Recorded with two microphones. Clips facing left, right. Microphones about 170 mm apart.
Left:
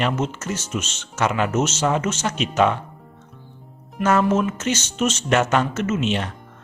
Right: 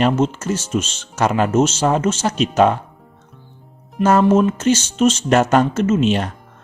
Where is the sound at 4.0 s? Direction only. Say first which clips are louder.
Right 5 dB; 30° right (ahead or behind).